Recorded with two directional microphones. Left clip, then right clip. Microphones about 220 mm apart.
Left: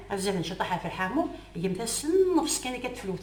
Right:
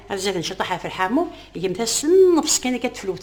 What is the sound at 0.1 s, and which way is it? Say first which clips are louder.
A woman's voice: right 6 dB; 50° right (ahead or behind).